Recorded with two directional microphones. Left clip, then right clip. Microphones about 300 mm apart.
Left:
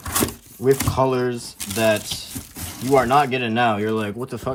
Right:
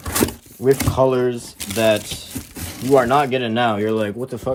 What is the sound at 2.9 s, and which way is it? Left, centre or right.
Speech, centre.